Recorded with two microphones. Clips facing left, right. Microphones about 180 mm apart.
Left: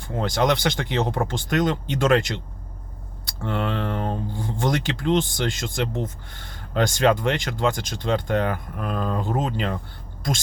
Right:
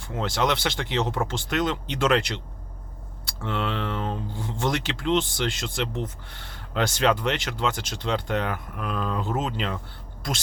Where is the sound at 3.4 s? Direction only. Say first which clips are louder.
Left 3 dB; 45° left (ahead or behind).